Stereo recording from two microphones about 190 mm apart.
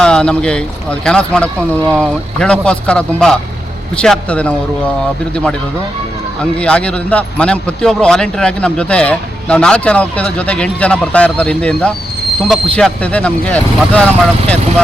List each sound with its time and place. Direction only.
0.0 s a man's voice: 5° left (ahead or behind)